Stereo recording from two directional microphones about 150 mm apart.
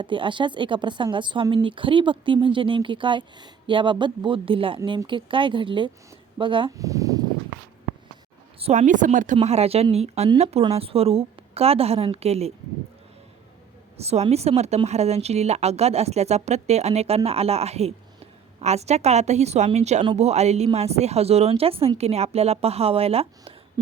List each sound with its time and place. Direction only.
0.0 s a woman's voice: 35° right (ahead or behind)
6.7 s speech: 20° right (ahead or behind)
8.5 s a woman's voice: 45° right (ahead or behind)
13.9 s speech: 45° right (ahead or behind)
23.8 s a sound: 30° right (ahead or behind)